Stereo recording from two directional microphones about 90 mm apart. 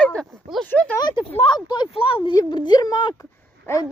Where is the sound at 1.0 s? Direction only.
50° left (ahead or behind).